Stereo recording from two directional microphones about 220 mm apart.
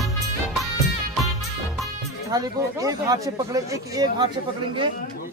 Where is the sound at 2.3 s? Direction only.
15° right (ahead or behind).